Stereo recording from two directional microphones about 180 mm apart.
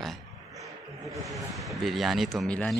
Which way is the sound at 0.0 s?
Centre (ahead or behind).